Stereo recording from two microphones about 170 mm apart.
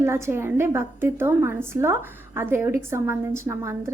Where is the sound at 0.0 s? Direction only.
15° right (ahead or behind).